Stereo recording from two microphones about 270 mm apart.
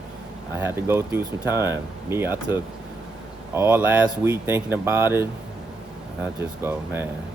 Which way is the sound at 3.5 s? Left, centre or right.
Centre.